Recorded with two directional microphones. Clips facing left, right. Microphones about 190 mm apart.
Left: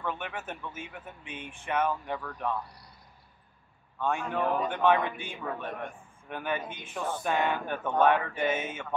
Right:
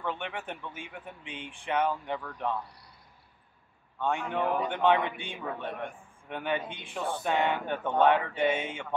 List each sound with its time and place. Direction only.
0.0 s a man's voice: 20° right (ahead or behind)
4.0 s a man's voice: 20° right (ahead or behind)